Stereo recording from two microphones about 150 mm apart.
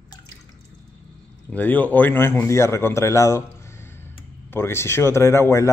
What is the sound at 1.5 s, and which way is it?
A man's voice, 10° left (ahead or behind).